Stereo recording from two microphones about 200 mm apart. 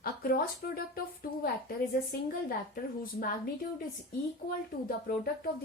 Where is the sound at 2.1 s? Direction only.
50° left (ahead or behind).